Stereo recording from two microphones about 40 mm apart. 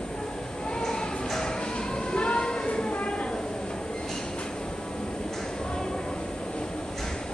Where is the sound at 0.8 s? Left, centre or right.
Centre; by 3.1 s left.